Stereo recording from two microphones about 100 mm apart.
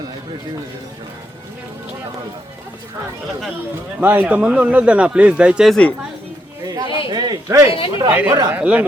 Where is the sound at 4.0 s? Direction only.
15° right (ahead or behind).